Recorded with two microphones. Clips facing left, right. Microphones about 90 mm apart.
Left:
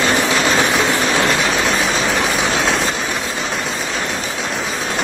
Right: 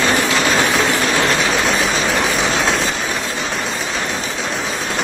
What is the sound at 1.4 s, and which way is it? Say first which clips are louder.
Vehicle: even; centre (ahead or behind).